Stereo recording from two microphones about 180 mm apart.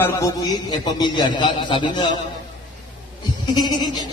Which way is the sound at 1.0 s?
25° left (ahead or behind).